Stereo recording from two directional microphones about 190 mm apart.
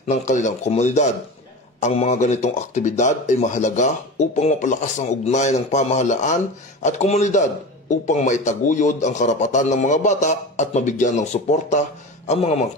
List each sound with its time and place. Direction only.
0.1 s speech: 40° left (ahead or behind)